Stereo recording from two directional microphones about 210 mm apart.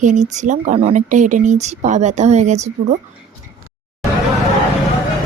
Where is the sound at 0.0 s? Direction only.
35° right (ahead or behind).